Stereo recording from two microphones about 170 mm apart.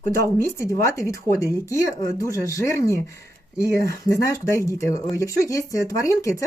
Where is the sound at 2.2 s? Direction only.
20° left (ahead or behind).